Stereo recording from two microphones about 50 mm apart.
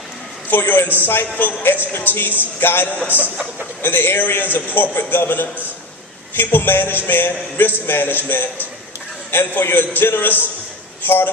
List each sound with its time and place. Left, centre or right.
0.4 s a man's voice: left